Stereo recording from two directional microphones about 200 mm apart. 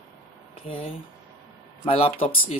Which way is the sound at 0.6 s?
25° left (ahead or behind).